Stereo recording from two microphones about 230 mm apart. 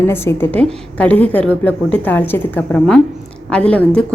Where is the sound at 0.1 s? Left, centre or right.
Centre.